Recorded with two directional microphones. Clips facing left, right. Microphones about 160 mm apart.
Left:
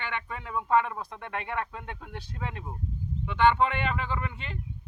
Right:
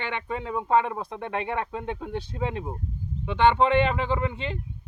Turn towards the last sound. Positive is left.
turn(degrees=-25)  # may be behind; listen again after turning